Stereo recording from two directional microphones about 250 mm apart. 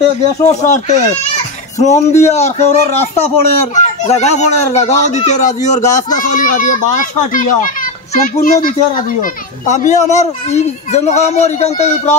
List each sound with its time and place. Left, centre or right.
0.5 s a child's voice: left